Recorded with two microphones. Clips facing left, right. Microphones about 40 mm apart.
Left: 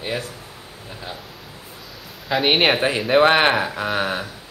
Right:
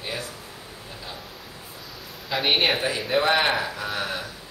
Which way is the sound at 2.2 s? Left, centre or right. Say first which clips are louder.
Left 5 dB; centre.